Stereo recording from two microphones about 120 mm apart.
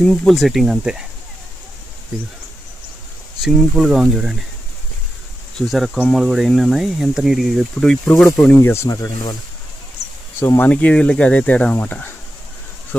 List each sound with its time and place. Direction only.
0.0 s speech: 10° left (ahead or behind)
0.3 s speech: centre (ahead or behind)
3.5 s speech: centre (ahead or behind)
5.5 s speech: centre (ahead or behind)
8.6 s speech: 20° left (ahead or behind)
10.4 s speech: 20° left (ahead or behind)
10.7 s speech: 10° left (ahead or behind)